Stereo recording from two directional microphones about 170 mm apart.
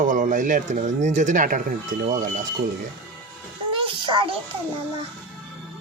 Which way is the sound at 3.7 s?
30° right (ahead or behind).